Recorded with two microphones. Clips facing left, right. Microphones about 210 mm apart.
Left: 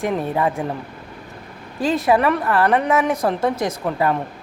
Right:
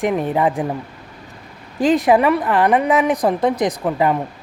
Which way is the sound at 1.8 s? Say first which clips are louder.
Right 3 dB; 20° right (ahead or behind).